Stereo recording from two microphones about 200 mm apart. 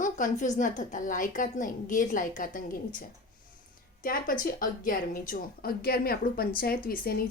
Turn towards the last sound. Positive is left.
turn(degrees=50)  # may be behind; listen again after turning